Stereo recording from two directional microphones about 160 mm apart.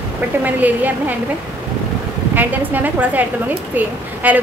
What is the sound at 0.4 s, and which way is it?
Speech, 10° right (ahead or behind).